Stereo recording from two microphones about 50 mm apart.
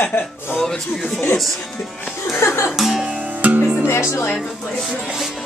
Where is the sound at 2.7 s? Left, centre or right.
Centre.